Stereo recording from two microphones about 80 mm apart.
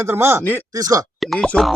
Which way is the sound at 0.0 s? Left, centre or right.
Right.